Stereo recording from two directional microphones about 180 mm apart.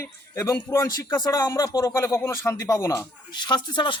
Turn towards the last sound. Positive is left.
turn(degrees=25)  # may be behind; listen again after turning